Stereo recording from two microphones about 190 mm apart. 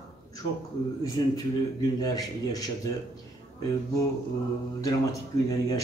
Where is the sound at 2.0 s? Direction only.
20° left (ahead or behind).